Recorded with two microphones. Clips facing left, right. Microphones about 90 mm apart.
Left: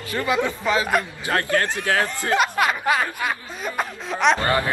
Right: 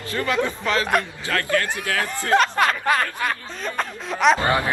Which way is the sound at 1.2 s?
30° left (ahead or behind).